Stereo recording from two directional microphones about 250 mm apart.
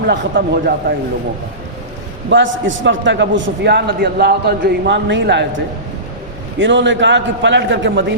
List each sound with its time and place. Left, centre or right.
0.1 s speech: right
2.3 s a man's voice: right
6.6 s a man's voice: right